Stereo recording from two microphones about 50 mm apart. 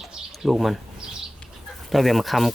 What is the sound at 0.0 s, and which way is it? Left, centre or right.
Bird, centre.